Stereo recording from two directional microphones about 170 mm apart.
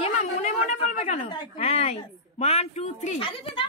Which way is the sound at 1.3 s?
30° left (ahead or behind).